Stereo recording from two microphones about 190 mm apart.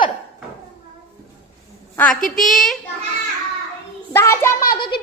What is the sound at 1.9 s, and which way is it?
Speech, 5° left (ahead or behind).